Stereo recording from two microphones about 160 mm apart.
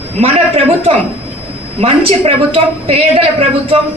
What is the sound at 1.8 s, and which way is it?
A man's voice, 35° right (ahead or behind).